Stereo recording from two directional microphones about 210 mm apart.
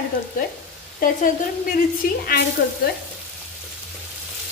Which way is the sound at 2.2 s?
50° left (ahead or behind).